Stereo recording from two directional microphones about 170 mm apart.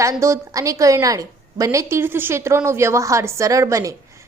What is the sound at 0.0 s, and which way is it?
A woman's voice, 15° right (ahead or behind).